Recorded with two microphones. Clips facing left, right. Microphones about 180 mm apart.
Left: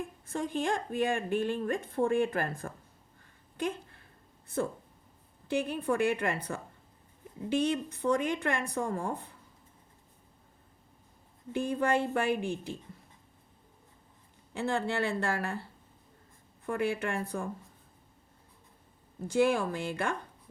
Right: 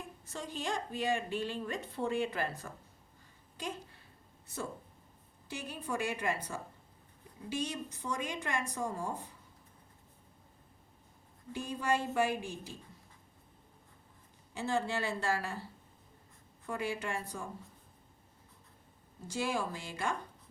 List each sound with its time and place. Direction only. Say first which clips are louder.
0.3 s a woman's voice: left 7 dB; 55° left (ahead or behind)
11.5 s speech: left 5 dB; 55° left (ahead or behind)
14.5 s speech: left 3 dB; 60° left (ahead or behind)
16.6 s speech: left 6 dB; 55° left (ahead or behind)
19.3 s speech: left 8 dB; 55° left (ahead or behind)